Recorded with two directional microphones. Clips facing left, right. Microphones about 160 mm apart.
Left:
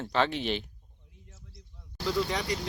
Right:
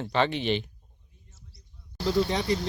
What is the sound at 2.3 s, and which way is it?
Speech, 25° right (ahead or behind).